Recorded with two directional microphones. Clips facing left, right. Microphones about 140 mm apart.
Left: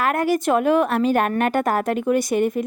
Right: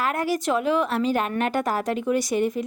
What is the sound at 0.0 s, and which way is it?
A woman's voice, 55° left (ahead or behind).